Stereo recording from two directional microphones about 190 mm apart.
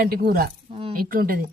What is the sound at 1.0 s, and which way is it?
Speech, 50° right (ahead or behind).